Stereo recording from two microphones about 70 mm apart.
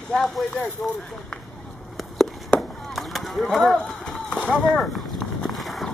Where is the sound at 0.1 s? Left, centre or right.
Centre.